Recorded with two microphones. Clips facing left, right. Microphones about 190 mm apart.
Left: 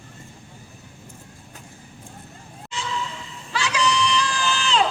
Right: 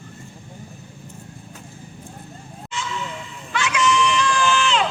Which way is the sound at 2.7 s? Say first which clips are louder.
Right 2 dB; 35° left (ahead or behind).